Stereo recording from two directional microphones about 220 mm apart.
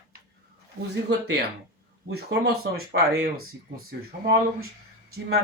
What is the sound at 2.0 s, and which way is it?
Speech, 45° right (ahead or behind).